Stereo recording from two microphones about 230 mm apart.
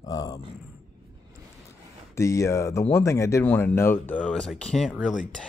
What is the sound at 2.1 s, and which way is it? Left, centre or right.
Speech, centre.